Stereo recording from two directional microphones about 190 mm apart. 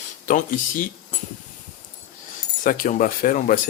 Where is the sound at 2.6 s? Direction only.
45° left (ahead or behind).